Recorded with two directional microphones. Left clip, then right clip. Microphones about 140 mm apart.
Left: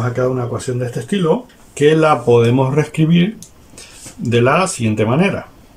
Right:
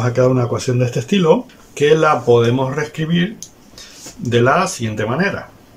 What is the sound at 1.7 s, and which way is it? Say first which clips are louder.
Speech: left 1 dB; 5° left (ahead or behind).